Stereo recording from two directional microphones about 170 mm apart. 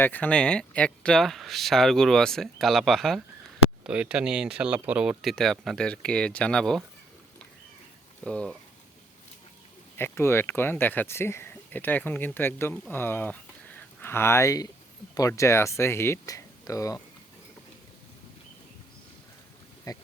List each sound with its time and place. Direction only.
0.0 s speech: 10° left (ahead or behind)
8.2 s speech: 5° left (ahead or behind)
10.0 s speech: 15° left (ahead or behind)
19.9 s speech: 20° left (ahead or behind)